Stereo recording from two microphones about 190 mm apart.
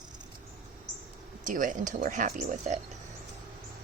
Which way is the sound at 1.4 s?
45° right (ahead or behind).